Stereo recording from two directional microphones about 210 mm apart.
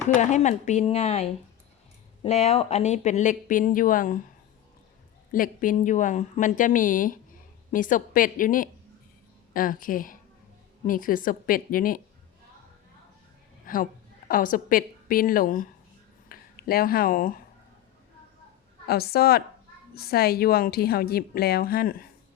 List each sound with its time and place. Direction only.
0.2 s speech: 35° left (ahead or behind)
5.3 s speech: 40° left (ahead or behind)
13.7 s speech: 40° left (ahead or behind)
18.9 s a woman's voice: 45° left (ahead or behind)